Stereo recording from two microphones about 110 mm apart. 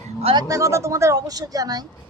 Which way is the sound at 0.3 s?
30° right (ahead or behind).